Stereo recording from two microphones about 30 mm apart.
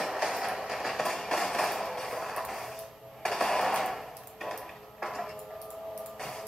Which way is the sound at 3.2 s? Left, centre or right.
Centre.